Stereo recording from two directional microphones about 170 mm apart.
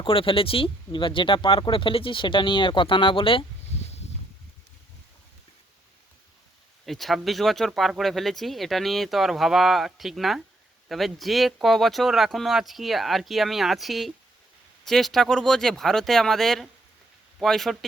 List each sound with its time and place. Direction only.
0.0 s speech: 30° left (ahead or behind)
6.8 s speech: centre (ahead or behind)